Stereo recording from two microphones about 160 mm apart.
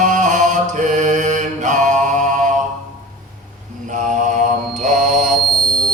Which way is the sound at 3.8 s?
50° right (ahead or behind).